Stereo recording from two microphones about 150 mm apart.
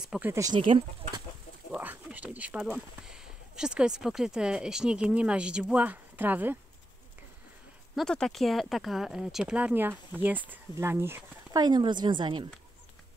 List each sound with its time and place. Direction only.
0.0 s speech: 5° right (ahead or behind)
0.3 s speech: 20° right (ahead or behind)
0.6 s a woman's voice: 35° right (ahead or behind)
1.7 s speech: 10° right (ahead or behind)
7.9 s speech: 5° left (ahead or behind); by 11.6 s 15° right (ahead or behind)
11.6 s a woman's voice: 30° right (ahead or behind)